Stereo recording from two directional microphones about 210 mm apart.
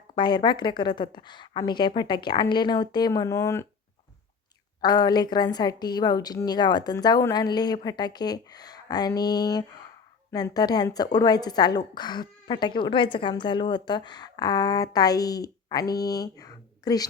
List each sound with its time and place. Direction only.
0.1 s a woman's voice: 20° left (ahead or behind)
4.8 s a woman's voice: 20° left (ahead or behind)